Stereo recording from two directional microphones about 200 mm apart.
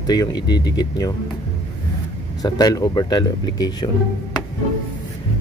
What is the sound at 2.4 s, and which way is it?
Speech, 20° left (ahead or behind).